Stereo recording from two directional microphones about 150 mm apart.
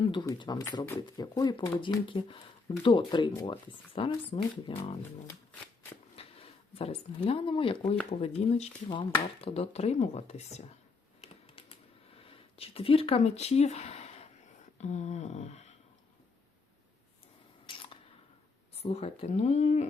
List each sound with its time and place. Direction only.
0.0 s a sound: 35° left (ahead or behind)
0.3 s speech: 30° left (ahead or behind)
5.3 s shuffling cards: 15° left (ahead or behind)
6.1 s speech: 40° left (ahead or behind)
8.9 s speech: 30° left (ahead or behind)
11.2 s typing: 40° left (ahead or behind)
12.2 s speech: 40° left (ahead or behind)
17.7 s a sound: 35° left (ahead or behind)
18.8 s speech: 45° left (ahead or behind)